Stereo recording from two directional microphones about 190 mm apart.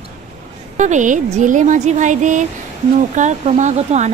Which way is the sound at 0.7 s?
40° right (ahead or behind).